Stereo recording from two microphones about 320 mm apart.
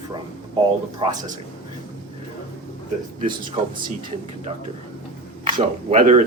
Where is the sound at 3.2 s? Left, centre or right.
Centre.